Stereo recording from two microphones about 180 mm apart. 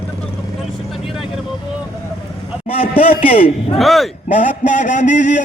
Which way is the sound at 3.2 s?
30° left (ahead or behind).